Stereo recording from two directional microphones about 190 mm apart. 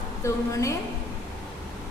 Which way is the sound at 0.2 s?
15° left (ahead or behind).